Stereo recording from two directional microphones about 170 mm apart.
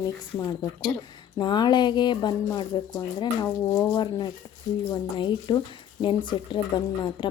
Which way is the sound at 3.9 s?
25° left (ahead or behind).